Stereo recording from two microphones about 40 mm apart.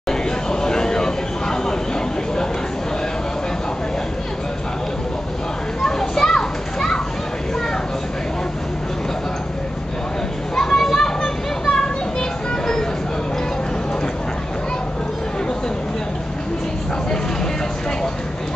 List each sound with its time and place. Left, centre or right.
0.1 s a sound: centre
5.8 s children playing: centre
10.5 s children playing: centre
11.6 s children playing: centre